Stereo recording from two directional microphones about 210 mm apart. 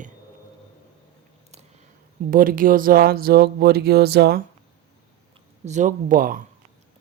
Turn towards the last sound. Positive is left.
turn(degrees=-40)  # may be behind; listen again after turning